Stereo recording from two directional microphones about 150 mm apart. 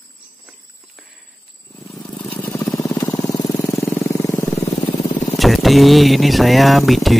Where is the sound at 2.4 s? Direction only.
20° left (ahead or behind).